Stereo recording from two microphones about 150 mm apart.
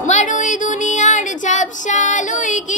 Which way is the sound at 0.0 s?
55° left (ahead or behind).